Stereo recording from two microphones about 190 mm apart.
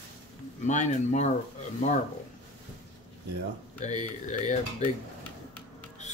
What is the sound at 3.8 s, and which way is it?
Speech, 40° left (ahead or behind).